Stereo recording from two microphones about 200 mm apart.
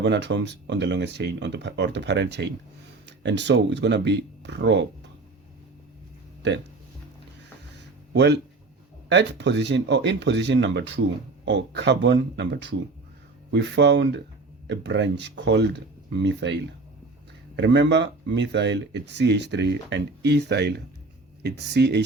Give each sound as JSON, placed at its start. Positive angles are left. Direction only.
{"t": 0.0, "sound": "speech", "side_deg": -65}
{"t": 8.1, "sound": "speech", "side_deg": -60}
{"t": 17.6, "sound": "speech", "side_deg": -60}